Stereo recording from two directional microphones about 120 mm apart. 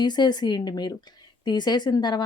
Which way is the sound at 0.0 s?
35° left (ahead or behind).